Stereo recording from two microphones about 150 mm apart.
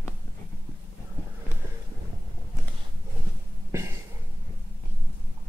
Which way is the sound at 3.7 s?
20° right (ahead or behind).